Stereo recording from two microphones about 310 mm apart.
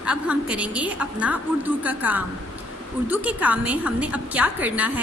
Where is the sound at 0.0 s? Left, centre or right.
Centre.